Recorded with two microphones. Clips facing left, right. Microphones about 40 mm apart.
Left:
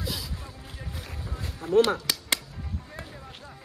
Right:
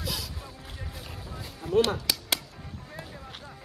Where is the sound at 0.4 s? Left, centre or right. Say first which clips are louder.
Even; centre.